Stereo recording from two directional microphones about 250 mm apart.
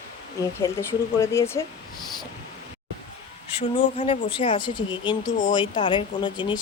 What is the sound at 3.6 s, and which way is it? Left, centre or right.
Speech, left.